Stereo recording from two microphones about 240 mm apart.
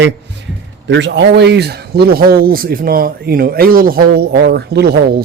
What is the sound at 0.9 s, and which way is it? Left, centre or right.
Speech, right.